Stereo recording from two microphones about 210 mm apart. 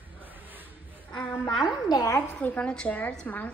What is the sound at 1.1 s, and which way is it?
Speech, 5° left (ahead or behind).